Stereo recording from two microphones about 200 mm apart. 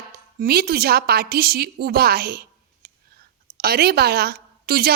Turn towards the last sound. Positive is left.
turn(degrees=-50)  # may be behind; listen again after turning